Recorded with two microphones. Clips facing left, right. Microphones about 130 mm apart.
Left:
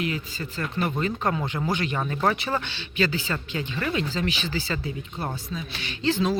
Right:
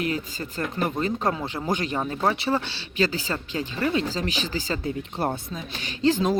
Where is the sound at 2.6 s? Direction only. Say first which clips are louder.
Right 1 dB; 35° right (ahead or behind).